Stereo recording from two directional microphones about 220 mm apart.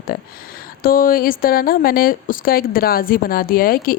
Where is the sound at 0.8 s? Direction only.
40° left (ahead or behind).